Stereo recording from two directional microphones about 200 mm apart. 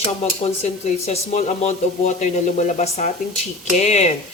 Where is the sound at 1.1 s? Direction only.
35° left (ahead or behind).